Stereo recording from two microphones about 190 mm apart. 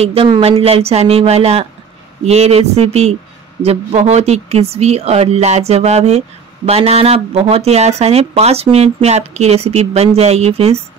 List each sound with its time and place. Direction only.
0.0 s speech: 30° right (ahead or behind)